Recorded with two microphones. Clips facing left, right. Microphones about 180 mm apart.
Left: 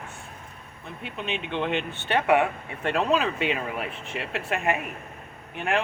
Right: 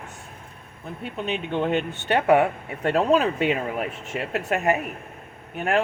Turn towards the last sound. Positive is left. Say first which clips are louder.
# right 3 dB
turn(degrees=-40)  # may be behind; listen again after turning